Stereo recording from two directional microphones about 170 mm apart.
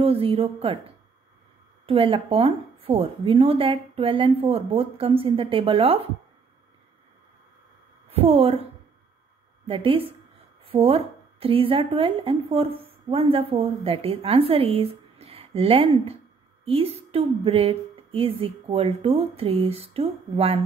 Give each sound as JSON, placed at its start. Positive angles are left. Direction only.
{"t": 0.0, "sound": "a woman's voice", "side_deg": -35}
{"t": 1.9, "sound": "speech", "side_deg": -30}
{"t": 8.1, "sound": "speech", "side_deg": -35}
{"t": 9.7, "sound": "speech", "side_deg": -35}